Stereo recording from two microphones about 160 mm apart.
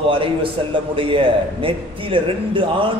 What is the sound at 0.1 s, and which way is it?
A man's voice, 35° right (ahead or behind).